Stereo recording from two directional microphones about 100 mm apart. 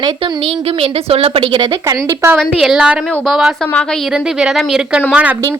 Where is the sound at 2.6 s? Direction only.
5° right (ahead or behind).